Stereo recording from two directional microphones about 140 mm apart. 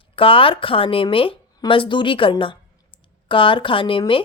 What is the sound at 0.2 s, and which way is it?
A woman's voice, 40° left (ahead or behind).